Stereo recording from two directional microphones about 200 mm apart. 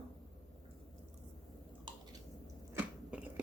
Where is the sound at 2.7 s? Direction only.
5° right (ahead or behind).